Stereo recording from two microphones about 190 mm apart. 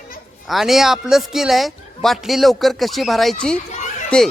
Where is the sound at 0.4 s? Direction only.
Centre (ahead or behind).